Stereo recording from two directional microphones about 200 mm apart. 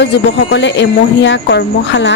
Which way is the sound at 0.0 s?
60° left (ahead or behind).